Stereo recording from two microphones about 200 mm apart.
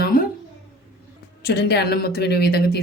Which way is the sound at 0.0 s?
45° left (ahead or behind).